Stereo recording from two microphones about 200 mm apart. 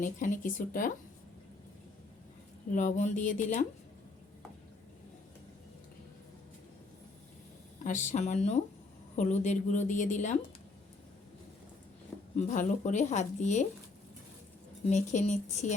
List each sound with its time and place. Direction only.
0.0 s a woman's voice: 40° left (ahead or behind)
2.7 s a woman's voice: 35° left (ahead or behind)
7.9 s a woman's voice: 40° left (ahead or behind)
12.4 s a woman's voice: 35° left (ahead or behind)
14.8 s a woman's voice: 35° left (ahead or behind)